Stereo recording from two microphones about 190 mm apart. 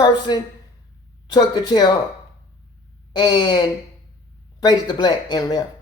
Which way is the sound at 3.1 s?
20° left (ahead or behind).